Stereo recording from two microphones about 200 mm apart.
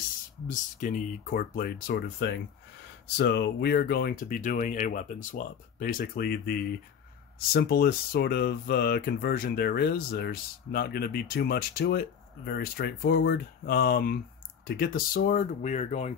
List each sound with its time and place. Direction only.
0.5 s speech: 40° left (ahead or behind)